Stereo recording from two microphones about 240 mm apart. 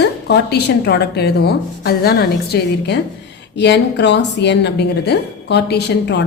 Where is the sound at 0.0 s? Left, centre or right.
Left.